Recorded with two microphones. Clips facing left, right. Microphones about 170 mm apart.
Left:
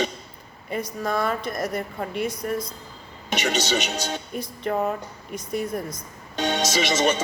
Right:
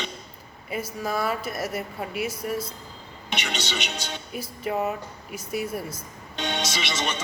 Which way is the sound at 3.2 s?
45° left (ahead or behind).